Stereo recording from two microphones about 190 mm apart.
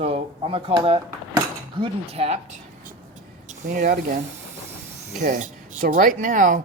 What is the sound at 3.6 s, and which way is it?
Speech, 45° right (ahead or behind).